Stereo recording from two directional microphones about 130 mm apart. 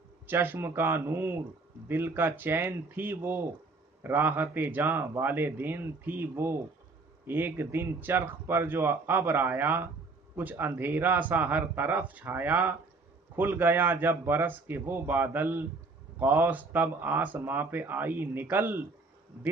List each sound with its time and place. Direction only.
0.3 s speech: 15° right (ahead or behind)